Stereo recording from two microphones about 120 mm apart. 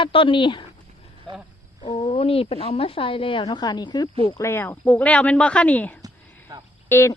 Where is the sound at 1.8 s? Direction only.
50° left (ahead or behind).